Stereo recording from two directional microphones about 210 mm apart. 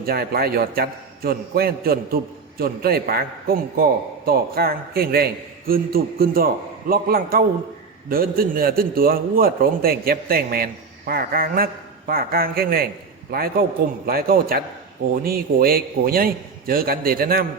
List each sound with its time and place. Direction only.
0.0 s a man's voice: 45° right (ahead or behind)